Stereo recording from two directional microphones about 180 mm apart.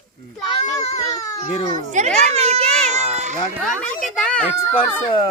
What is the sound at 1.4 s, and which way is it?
Speech, 35° left (ahead or behind).